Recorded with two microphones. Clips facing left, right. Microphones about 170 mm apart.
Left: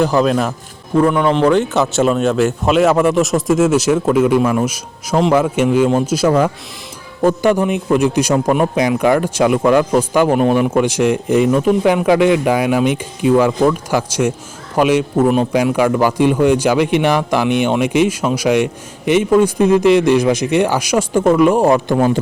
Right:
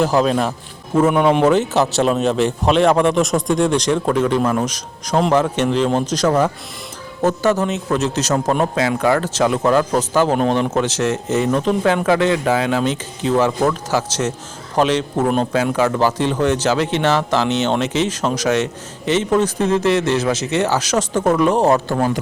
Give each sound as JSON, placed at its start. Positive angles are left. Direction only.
{"t": 0.0, "sound": "speech", "side_deg": 0}